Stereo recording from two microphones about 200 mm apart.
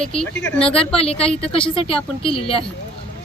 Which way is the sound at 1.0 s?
30° left (ahead or behind).